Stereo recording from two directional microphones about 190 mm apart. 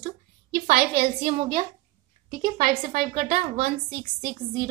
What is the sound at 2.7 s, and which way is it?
A woman's voice, 40° right (ahead or behind).